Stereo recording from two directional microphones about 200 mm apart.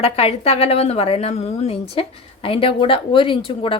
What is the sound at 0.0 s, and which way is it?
A woman's voice, 30° left (ahead or behind).